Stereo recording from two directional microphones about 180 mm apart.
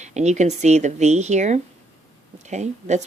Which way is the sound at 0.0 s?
40° right (ahead or behind).